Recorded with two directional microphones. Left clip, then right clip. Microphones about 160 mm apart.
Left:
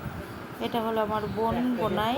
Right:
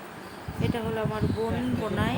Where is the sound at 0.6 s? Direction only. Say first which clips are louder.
Left 3 dB; 15° left (ahead or behind).